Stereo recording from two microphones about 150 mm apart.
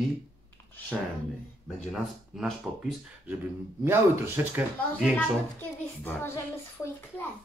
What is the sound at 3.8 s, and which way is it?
Speech, 15° right (ahead or behind).